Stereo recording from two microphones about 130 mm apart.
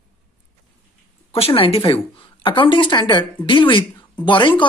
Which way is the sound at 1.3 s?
45° left (ahead or behind).